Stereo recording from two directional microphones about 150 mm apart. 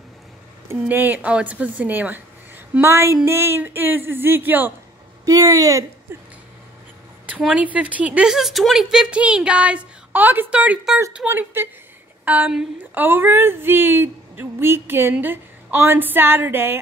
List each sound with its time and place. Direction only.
0.7 s speech: 15° right (ahead or behind)
5.2 s speech: 25° right (ahead or behind)